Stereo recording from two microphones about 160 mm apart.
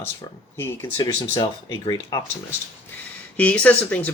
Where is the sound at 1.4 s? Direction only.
25° left (ahead or behind).